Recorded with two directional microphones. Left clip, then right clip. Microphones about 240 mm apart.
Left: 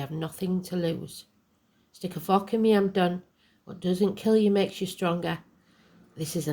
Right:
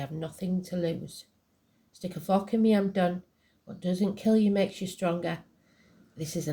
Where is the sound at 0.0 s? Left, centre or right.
Left.